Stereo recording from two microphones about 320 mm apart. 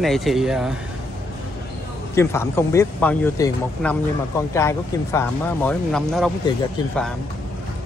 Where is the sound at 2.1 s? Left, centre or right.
Centre.